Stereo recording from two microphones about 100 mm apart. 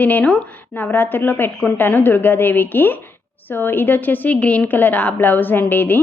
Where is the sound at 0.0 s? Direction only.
15° left (ahead or behind).